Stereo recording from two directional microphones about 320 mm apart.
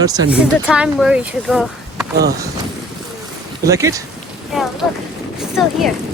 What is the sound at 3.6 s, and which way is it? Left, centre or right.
Speech, centre.